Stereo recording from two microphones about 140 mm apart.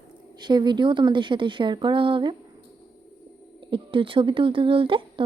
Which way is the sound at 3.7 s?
40° right (ahead or behind).